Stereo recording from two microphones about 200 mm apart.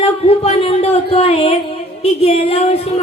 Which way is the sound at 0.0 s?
30° left (ahead or behind).